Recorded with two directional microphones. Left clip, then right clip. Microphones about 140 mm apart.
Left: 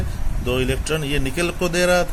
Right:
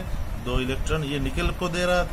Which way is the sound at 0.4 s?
30° left (ahead or behind).